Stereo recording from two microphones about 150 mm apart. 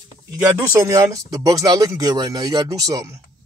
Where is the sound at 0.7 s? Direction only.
20° right (ahead or behind).